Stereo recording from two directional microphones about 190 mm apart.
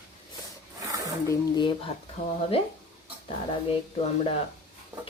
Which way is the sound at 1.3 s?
20° left (ahead or behind).